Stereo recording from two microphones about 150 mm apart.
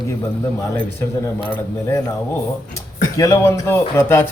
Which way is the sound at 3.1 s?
20° left (ahead or behind).